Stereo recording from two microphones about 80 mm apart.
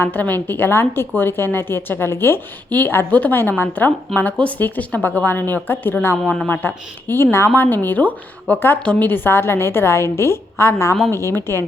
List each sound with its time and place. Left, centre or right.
0.0 s a woman's voice: left
6.2 s speech: centre
6.5 s a woman's voice: left
8.8 s speech: centre
9.0 s a woman's voice: left